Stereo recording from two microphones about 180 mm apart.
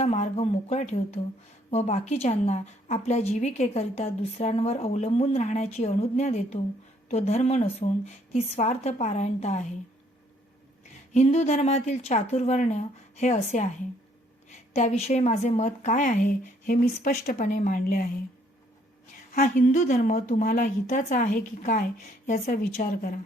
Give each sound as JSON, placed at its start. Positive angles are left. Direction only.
{"t": 0.0, "sound": "a woman's voice", "side_deg": 35}
{"t": 11.1, "sound": "a woman's voice", "side_deg": 40}
{"t": 14.7, "sound": "a woman's voice", "side_deg": 40}
{"t": 19.3, "sound": "a woman's voice", "side_deg": 45}